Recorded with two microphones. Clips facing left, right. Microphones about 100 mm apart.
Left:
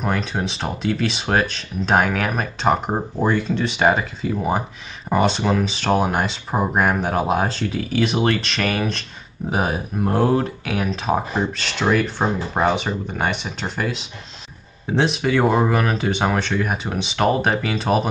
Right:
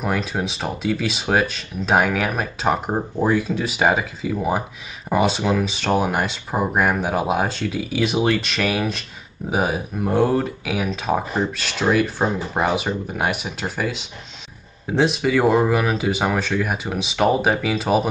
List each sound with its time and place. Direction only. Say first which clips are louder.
0.0 s speech: even; 5° right (ahead or behind)